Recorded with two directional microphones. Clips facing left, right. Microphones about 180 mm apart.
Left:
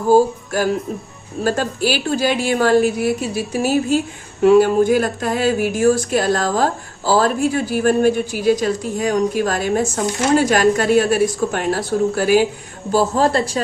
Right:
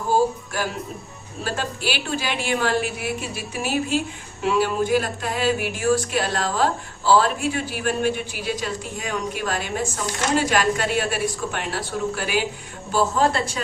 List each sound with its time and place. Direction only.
0.1 s a woman's voice: 45° left (ahead or behind)